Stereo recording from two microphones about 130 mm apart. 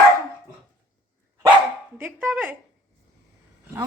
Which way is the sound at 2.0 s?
15° right (ahead or behind).